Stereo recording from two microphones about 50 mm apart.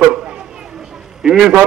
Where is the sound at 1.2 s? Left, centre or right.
Centre.